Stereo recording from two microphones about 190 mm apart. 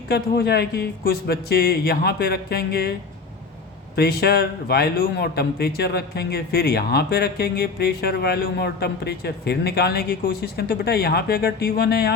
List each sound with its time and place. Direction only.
0.1 s a man's voice: 60° left (ahead or behind)
3.9 s a man's voice: 55° left (ahead or behind)